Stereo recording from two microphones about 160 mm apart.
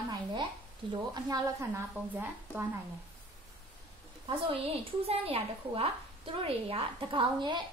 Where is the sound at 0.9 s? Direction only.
25° right (ahead or behind).